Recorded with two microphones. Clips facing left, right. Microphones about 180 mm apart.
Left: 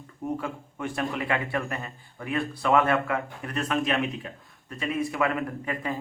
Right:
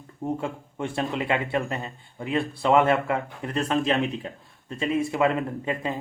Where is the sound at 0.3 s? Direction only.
25° right (ahead or behind).